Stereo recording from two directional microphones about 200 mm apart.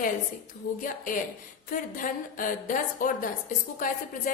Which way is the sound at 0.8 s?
45° left (ahead or behind).